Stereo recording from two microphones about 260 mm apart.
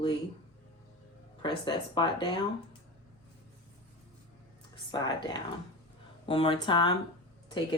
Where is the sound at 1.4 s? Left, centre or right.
Centre.